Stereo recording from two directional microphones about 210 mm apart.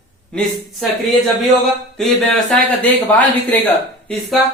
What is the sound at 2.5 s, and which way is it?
Speech, 5° left (ahead or behind).